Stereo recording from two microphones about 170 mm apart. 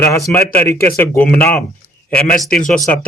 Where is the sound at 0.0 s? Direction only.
15° left (ahead or behind).